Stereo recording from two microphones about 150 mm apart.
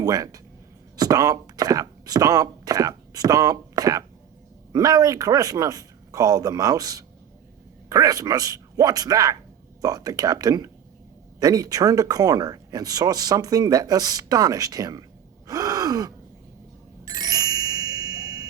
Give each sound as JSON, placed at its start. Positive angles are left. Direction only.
{"t": 0.0, "sound": "speech", "side_deg": -25}
{"t": 15.4, "sound": "gasp", "side_deg": -25}
{"t": 17.1, "sound": "music", "side_deg": -25}